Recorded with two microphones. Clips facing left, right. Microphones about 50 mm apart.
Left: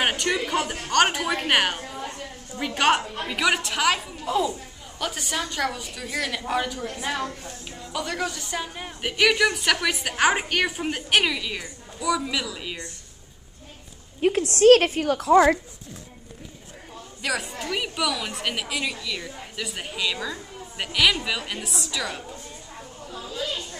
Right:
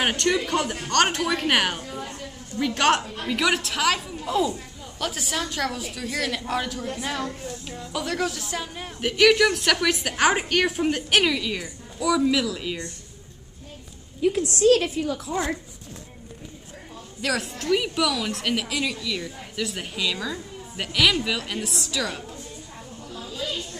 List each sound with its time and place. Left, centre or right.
0.0 s a woman's voice: centre
2.0 s a sound: left
2.5 s a woman's voice: centre
14.5 s a woman's voice: left
17.2 s a woman's voice: centre
23.1 s a sound: centre